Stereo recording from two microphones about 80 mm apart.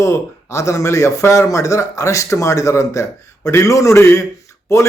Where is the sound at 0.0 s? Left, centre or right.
Left.